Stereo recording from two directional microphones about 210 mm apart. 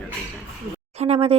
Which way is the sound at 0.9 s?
30° right (ahead or behind).